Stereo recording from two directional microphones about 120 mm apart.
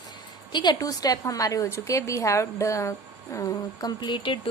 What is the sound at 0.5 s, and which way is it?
A woman's voice, 35° left (ahead or behind).